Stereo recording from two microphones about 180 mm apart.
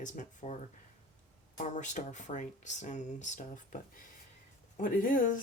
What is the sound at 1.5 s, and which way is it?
Speech, 40° left (ahead or behind).